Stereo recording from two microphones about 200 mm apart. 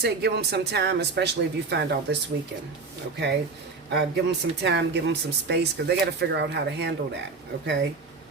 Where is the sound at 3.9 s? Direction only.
60° right (ahead or behind).